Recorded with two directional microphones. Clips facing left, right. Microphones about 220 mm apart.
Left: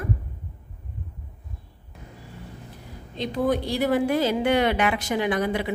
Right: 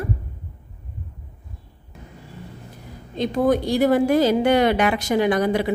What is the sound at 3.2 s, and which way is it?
A woman's voice, 45° right (ahead or behind).